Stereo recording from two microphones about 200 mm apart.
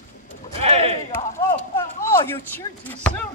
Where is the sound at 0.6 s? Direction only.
30° right (ahead or behind).